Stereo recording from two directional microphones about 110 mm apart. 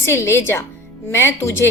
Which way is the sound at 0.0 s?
25° left (ahead or behind).